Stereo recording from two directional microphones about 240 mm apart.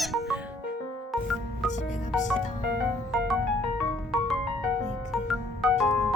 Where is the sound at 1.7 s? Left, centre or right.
Left.